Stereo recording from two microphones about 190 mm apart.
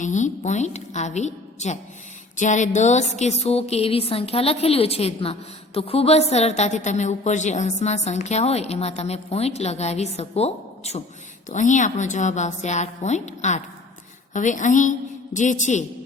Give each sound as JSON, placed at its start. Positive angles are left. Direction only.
{"t": 0.0, "sound": "a woman's voice", "side_deg": 40}